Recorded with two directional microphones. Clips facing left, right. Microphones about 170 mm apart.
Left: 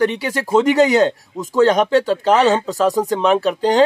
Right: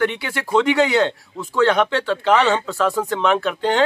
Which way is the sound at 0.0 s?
35° left (ahead or behind).